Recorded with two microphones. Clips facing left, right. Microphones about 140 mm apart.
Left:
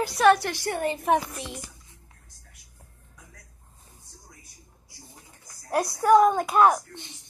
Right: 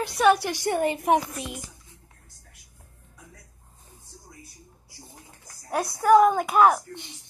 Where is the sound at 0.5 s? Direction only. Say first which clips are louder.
Right 3 dB; 20° right (ahead or behind).